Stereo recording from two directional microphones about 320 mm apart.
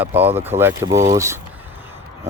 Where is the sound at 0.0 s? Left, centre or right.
Centre.